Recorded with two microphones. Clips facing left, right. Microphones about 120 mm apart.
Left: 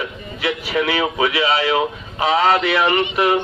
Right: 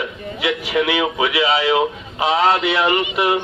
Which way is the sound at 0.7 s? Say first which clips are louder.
Right 1 dB; 35° left (ahead or behind).